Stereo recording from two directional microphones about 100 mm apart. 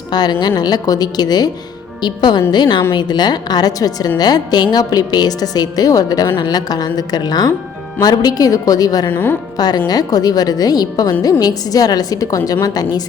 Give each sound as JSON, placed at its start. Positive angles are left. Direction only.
{"t": 0.1, "sound": "a woman's voice", "side_deg": 45}
{"t": 9.0, "sound": "speech", "side_deg": 20}
{"t": 9.6, "sound": "a woman's voice", "side_deg": 40}